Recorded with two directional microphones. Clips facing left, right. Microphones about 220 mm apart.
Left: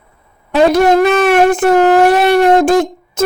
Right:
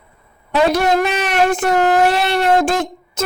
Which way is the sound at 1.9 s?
50° left (ahead or behind).